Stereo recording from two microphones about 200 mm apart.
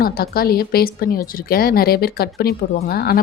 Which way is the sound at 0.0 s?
45° left (ahead or behind).